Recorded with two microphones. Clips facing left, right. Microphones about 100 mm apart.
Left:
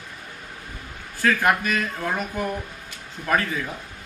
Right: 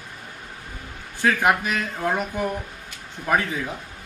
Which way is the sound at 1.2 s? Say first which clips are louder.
Even; 15° right (ahead or behind).